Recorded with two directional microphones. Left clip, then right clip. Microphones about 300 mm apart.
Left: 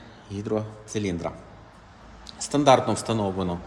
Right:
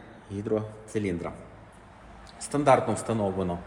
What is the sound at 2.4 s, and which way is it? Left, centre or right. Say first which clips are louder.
A man's voice: left 3 dB; centre.